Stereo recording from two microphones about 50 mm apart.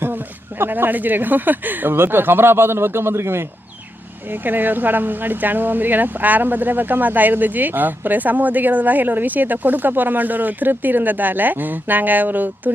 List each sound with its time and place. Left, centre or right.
0.0 s speech: right
4.3 s speech: right